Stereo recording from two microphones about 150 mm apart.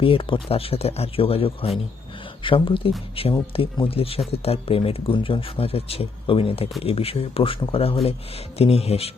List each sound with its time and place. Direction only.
0.0 s speech: 35° left (ahead or behind)